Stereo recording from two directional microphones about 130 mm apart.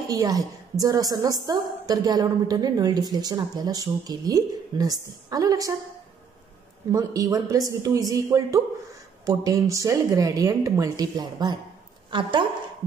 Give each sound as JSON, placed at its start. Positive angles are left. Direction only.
{"t": 0.1, "sound": "a woman's voice", "side_deg": -30}
{"t": 6.9, "sound": "a woman's voice", "side_deg": -25}